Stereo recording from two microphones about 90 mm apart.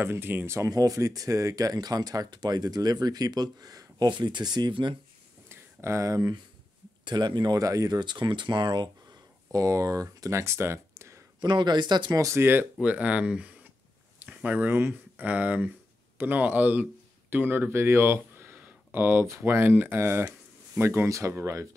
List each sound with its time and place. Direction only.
0.0 s speech: 25° right (ahead or behind)
0.7 s speech: 40° right (ahead or behind)
4.1 s speech: 60° right (ahead or behind)
5.5 s a sound: 30° right (ahead or behind)
7.1 s speech: 55° right (ahead or behind)
8.0 s speech: 60° right (ahead or behind)
9.5 s speech: 40° right (ahead or behind)
11.4 s speech: 55° right (ahead or behind)
12.1 s speech: 35° right (ahead or behind)
12.8 s speech: 15° right (ahead or behind); by 21.6 s 30° right (ahead or behind)